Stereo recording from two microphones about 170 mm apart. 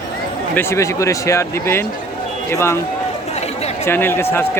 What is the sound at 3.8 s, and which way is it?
Speech, 15° left (ahead or behind).